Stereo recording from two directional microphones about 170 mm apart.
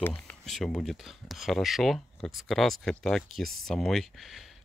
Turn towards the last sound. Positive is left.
turn(degrees=0)  # may be behind; listen again after turning